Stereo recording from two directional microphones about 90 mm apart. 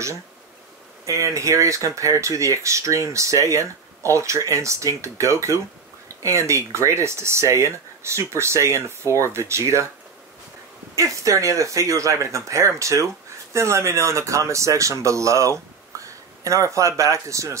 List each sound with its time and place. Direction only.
1.0 s speech: 35° right (ahead or behind)
11.0 s speech: 35° right (ahead or behind)